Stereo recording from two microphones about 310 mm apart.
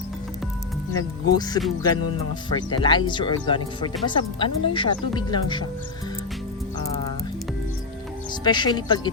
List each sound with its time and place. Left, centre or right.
0.9 s speech: centre
8.4 s speech: centre